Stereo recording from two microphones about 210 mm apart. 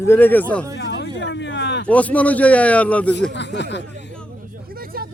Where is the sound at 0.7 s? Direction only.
55° left (ahead or behind).